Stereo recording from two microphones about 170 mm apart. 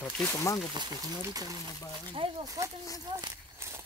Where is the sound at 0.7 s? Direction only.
20° right (ahead or behind).